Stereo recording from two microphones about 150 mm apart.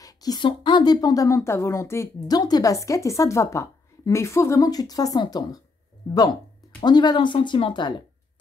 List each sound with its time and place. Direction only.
0.0 s a sound: 25° left (ahead or behind)
0.5 s a woman's voice: 30° left (ahead or behind)
6.8 s speech: 30° left (ahead or behind)